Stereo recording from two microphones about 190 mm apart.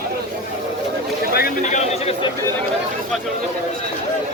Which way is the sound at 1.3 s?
50° left (ahead or behind).